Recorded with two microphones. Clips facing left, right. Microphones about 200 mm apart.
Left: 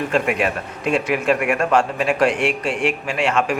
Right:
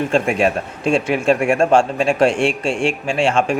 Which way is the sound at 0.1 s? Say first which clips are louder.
Right 3 dB; 30° right (ahead or behind).